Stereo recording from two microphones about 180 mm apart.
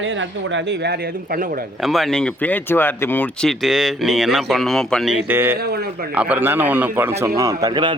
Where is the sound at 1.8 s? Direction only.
Centre (ahead or behind).